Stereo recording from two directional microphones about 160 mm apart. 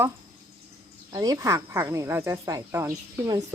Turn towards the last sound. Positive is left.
turn(degrees=-20)  # may be behind; listen again after turning